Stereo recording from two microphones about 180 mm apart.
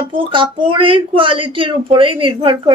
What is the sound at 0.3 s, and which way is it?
Speech, 25° right (ahead or behind).